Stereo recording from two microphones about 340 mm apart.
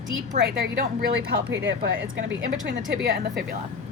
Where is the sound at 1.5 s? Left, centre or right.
Right.